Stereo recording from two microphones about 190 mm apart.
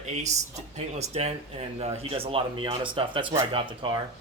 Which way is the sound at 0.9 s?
35° right (ahead or behind).